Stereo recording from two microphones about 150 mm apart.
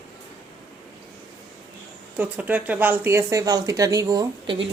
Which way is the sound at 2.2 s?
10° right (ahead or behind).